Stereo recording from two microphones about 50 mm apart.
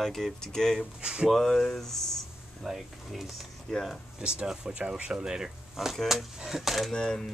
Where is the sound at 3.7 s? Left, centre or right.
Centre.